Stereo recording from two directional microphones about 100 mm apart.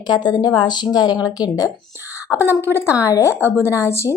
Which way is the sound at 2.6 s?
25° left (ahead or behind).